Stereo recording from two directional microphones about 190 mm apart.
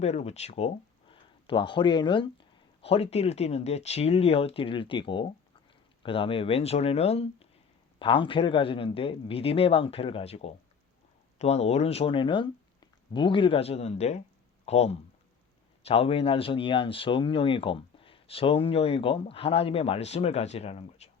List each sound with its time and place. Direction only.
0.0 s speech: 35° left (ahead or behind)